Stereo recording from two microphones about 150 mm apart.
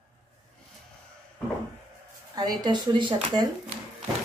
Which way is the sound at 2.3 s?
30° right (ahead or behind).